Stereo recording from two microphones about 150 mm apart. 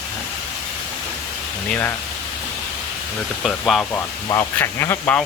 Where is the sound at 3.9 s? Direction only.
20° left (ahead or behind).